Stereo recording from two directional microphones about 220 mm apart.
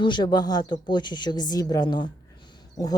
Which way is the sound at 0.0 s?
20° left (ahead or behind).